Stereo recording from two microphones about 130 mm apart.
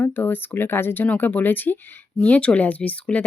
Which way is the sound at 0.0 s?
15° left (ahead or behind).